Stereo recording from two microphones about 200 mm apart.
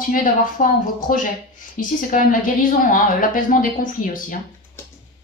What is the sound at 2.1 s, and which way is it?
A woman's voice, 40° left (ahead or behind).